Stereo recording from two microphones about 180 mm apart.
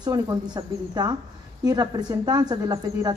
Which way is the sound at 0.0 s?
20° right (ahead or behind).